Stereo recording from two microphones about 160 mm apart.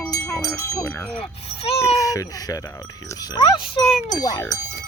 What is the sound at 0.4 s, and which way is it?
Speech, 20° left (ahead or behind).